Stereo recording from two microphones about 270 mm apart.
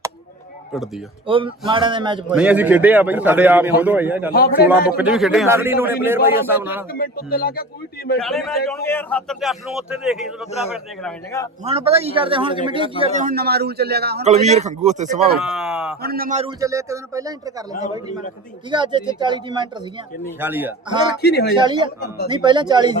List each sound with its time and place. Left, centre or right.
1.3 s a man's voice: centre
2.3 s a man's voice: centre
4.3 s speech: left
4.9 s a man's voice: centre
6.9 s speech: left
8.2 s a man's voice: centre
11.6 s a man's voice: right
14.3 s a man's voice: right
15.4 s a sound: centre
16.0 s speech: right
16.6 s a man's voice: centre
18.7 s a man's voice: centre
21.2 s speech: left
21.6 s a man's voice: centre